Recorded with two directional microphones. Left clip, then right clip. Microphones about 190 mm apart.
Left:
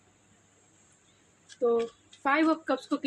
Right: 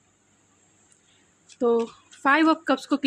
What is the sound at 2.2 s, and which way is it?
Speech, 60° right (ahead or behind).